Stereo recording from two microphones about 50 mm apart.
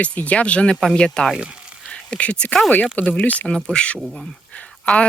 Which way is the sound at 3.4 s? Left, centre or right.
Centre.